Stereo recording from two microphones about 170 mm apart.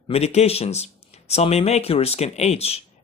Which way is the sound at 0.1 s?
40° left (ahead or behind).